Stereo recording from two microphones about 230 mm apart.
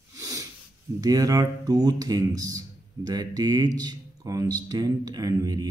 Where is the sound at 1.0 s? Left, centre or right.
Centre.